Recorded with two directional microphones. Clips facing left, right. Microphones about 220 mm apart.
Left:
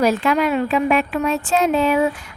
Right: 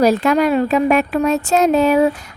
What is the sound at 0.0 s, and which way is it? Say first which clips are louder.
A woman's voice: right 4 dB; 40° right (ahead or behind).